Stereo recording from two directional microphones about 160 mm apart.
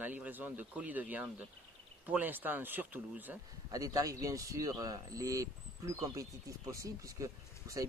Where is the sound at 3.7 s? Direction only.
20° right (ahead or behind).